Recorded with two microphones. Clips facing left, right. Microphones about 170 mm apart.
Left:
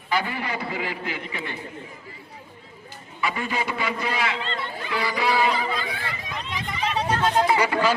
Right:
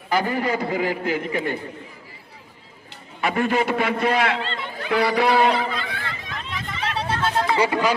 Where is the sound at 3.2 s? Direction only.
50° right (ahead or behind).